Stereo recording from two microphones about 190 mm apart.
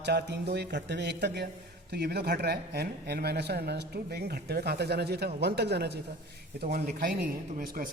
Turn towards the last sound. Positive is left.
turn(degrees=-45)  # may be behind; listen again after turning